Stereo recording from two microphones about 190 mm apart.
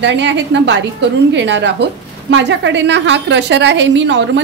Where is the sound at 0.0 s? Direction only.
70° right (ahead or behind).